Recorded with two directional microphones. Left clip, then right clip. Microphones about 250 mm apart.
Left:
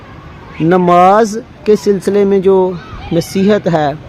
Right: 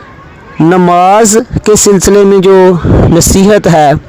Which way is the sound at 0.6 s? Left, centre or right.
Right.